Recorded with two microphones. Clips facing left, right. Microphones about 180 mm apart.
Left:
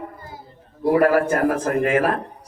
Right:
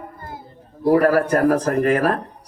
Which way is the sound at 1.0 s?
40° right (ahead or behind).